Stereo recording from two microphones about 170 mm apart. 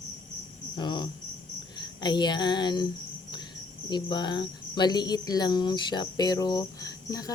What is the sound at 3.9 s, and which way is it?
Cricket, 25° left (ahead or behind).